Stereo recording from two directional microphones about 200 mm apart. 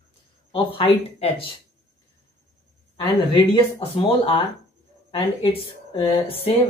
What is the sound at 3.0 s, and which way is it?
Speech, 25° left (ahead or behind).